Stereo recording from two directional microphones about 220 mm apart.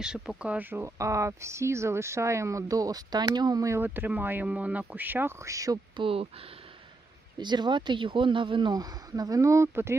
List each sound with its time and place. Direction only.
0.0 s speech: 5° right (ahead or behind); by 6.2 s 25° right (ahead or behind)
7.3 s speech: 20° right (ahead or behind)